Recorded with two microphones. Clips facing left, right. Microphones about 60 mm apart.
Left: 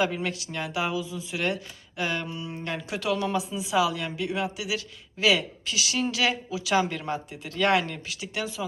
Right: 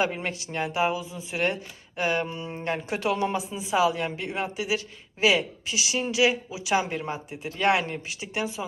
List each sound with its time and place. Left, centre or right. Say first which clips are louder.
0.0 s speech: even; right